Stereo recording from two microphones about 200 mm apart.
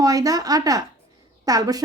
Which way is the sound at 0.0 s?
20° right (ahead or behind).